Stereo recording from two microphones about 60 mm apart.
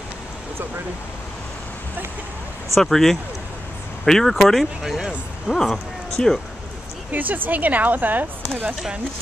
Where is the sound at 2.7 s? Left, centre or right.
Centre.